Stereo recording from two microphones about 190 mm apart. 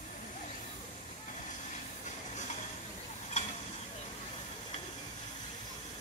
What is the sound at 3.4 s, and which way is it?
Mechanisms, 40° left (ahead or behind).